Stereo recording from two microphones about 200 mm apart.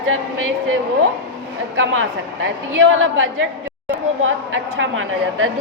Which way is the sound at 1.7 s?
70° right (ahead or behind).